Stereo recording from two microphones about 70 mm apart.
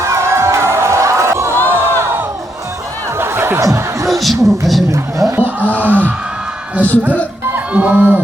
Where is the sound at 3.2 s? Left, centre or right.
Right.